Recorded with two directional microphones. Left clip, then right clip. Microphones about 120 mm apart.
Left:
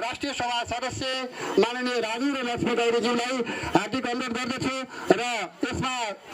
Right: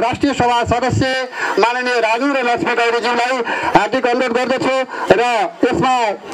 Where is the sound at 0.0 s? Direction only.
15° left (ahead or behind).